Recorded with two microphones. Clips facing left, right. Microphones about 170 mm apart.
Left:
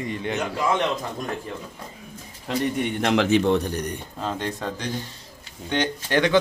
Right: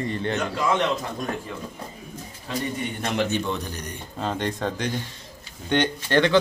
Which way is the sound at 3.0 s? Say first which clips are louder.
Left 6 dB; 90° left.